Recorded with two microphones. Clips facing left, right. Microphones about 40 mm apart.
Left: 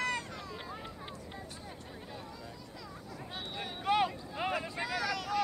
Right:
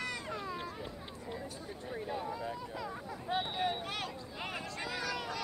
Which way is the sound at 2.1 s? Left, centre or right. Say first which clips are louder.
Right 10 dB; right.